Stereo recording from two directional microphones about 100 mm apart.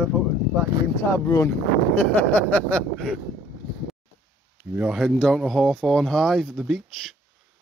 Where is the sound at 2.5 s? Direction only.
10° left (ahead or behind).